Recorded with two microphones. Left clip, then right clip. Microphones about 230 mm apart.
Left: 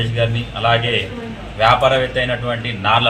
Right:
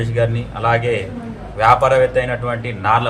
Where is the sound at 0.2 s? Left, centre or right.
Centre.